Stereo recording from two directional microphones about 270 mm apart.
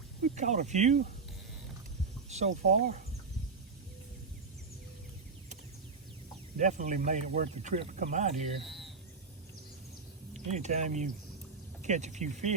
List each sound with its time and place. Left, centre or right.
0.2 s speech: right
2.3 s speech: right
6.6 s speech: right
8.6 s a sound: centre
10.3 s speech: right